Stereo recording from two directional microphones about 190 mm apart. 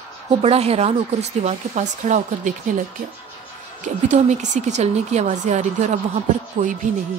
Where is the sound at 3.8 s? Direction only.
40° right (ahead or behind).